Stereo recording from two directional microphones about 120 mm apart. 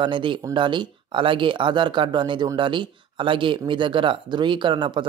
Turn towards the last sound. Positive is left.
turn(degrees=-40)  # may be behind; listen again after turning